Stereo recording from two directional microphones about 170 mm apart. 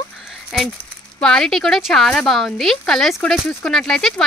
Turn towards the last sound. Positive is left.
turn(degrees=5)  # may be behind; listen again after turning